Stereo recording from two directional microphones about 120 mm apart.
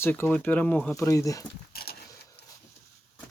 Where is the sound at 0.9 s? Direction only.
25° left (ahead or behind).